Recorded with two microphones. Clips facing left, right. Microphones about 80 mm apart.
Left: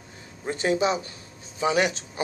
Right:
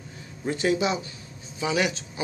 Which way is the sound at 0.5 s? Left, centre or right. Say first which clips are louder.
Left 1 dB; left.